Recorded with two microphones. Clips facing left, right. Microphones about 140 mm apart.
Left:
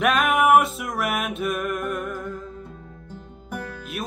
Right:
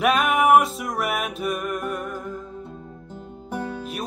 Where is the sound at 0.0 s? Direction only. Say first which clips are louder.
Even; centre (ahead or behind).